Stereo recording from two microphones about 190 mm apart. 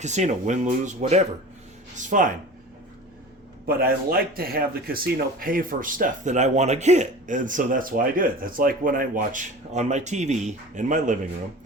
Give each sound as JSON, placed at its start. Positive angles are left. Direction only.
{"t": 0.0, "sound": "speech", "side_deg": -40}
{"t": 3.7, "sound": "speech", "side_deg": -50}